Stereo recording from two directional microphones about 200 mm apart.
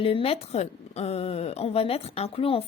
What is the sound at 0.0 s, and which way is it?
A woman's voice, 30° left (ahead or behind).